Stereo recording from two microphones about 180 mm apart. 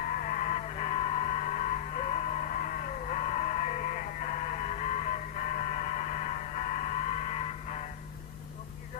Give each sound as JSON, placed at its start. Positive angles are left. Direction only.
{"t": 0.0, "sound": "music", "side_deg": 50}